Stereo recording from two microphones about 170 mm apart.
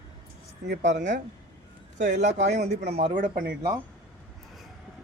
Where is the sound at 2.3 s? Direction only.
80° right.